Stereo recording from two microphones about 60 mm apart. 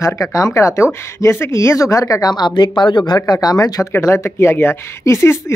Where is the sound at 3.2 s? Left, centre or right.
Left.